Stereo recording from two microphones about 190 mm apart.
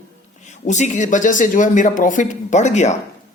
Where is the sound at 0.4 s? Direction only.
40° left (ahead or behind).